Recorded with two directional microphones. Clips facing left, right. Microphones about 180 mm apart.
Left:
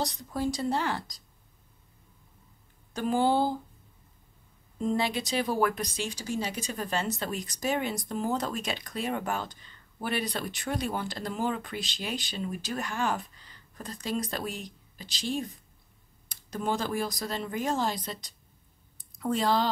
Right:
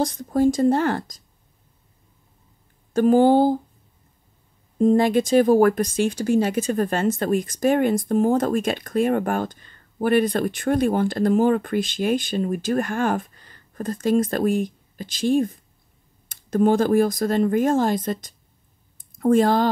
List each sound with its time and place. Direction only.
0.0 s speech: 50° right (ahead or behind)
2.9 s speech: 50° right (ahead or behind)
4.7 s speech: 45° right (ahead or behind)